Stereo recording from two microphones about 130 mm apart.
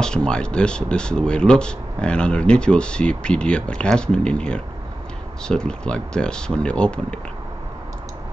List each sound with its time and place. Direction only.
0.0 s speech: 5° left (ahead or behind)